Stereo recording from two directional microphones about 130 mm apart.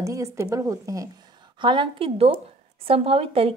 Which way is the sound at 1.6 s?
40° right (ahead or behind).